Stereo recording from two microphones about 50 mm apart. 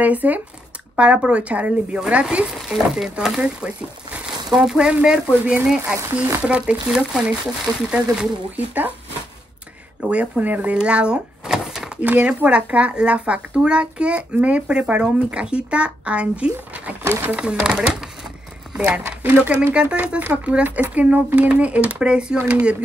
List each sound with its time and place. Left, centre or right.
0.0 s a child's voice: right
2.4 s speech: centre
3.3 s speech: right
5.4 s a child's voice: right
8.5 s a child's voice: right
10.0 s a child's voice: right
10.4 s speech: right
10.7 s speech: right
12.0 s a child's voice: right